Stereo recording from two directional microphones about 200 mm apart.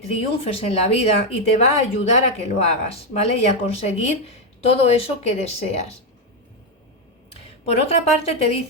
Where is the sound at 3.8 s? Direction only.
35° left (ahead or behind).